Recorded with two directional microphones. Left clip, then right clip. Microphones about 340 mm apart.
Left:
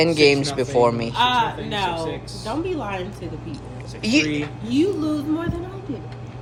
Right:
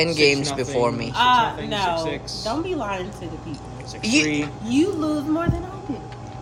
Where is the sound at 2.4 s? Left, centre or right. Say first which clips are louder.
Even; centre.